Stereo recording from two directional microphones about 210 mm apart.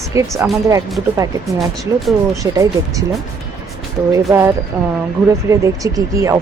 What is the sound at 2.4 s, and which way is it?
Speech, 15° right (ahead or behind).